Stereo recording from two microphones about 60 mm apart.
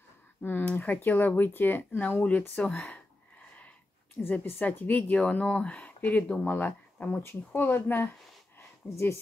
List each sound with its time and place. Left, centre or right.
0.4 s speech: left
4.2 s speech: left
4.6 s speech: left
5.9 s speech: left
6.2 s speech: left
8.5 s a sound: left